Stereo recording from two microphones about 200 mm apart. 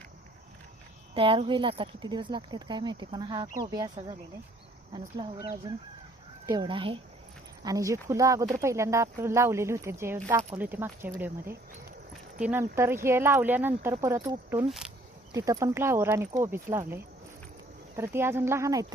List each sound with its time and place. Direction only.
1.1 s speech: 25° right (ahead or behind)
4.9 s speech: 25° right (ahead or behind); by 14.9 s 5° right (ahead or behind)
15.3 s speech: 15° right (ahead or behind)